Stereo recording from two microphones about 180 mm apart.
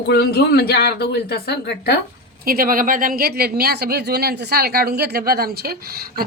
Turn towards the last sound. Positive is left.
turn(degrees=-55)  # may be behind; listen again after turning